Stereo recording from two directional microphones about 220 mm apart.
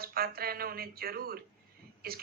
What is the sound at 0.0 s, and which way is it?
A woman's voice, 45° right (ahead or behind).